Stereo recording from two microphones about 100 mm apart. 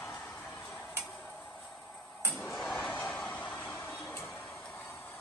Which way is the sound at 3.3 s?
15° left (ahead or behind).